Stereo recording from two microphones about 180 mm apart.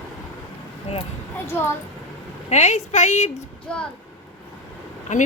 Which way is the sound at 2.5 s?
40° left (ahead or behind).